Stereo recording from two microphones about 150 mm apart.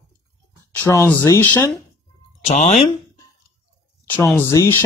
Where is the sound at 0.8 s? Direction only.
15° left (ahead or behind).